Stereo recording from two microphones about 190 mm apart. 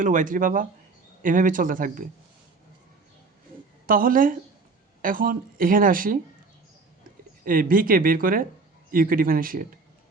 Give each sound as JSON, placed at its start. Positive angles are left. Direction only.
{"t": 0.0, "sound": "speech", "side_deg": -40}
{"t": 3.8, "sound": "speech", "side_deg": -50}
{"t": 7.4, "sound": "speech", "side_deg": -50}